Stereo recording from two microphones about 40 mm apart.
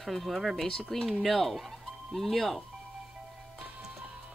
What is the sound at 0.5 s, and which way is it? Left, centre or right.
Speech, centre.